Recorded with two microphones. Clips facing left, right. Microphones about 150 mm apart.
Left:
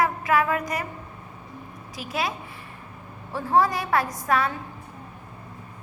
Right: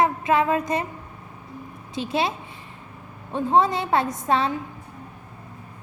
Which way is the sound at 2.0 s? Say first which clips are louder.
Right 5 dB; 25° right (ahead or behind).